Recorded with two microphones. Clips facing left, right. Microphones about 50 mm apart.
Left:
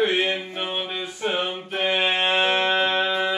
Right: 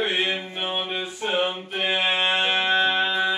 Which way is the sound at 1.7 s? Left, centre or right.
Centre.